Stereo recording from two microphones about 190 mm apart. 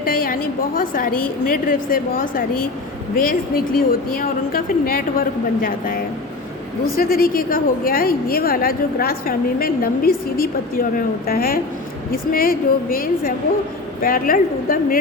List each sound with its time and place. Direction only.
0.0 s a woman's voice: 50° left (ahead or behind)